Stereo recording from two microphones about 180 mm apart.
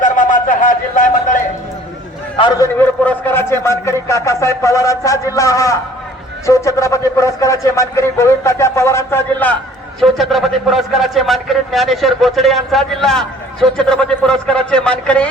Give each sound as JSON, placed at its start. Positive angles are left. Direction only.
{"t": 0.0, "sound": "a sound", "side_deg": 45}
{"t": 2.4, "sound": "a man's voice", "side_deg": 30}
{"t": 2.7, "sound": "a man's voice", "side_deg": 10}
{"t": 10.0, "sound": "a man's voice", "side_deg": 0}